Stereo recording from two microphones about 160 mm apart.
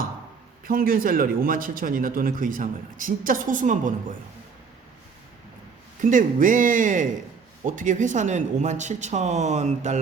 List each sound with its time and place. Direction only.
0.6 s a man's voice: 65° right (ahead or behind)
6.0 s a man's voice: 55° right (ahead or behind)